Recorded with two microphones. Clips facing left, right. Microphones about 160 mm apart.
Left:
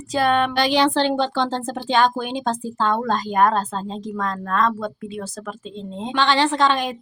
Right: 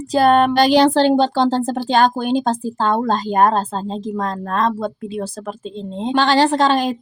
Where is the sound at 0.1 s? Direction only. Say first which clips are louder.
Right 6 dB; 40° right (ahead or behind).